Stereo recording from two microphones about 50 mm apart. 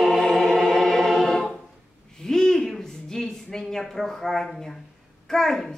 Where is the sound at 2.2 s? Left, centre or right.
Centre.